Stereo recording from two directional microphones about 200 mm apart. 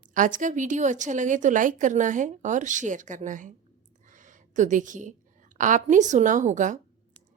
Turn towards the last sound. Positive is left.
turn(degrees=-40)  # may be behind; listen again after turning